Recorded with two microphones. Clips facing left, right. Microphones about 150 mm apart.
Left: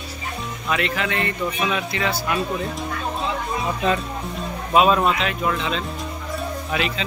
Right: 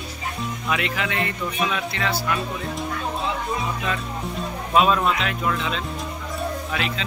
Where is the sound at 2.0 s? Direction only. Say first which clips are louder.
Right 1 dB; 20° left (ahead or behind).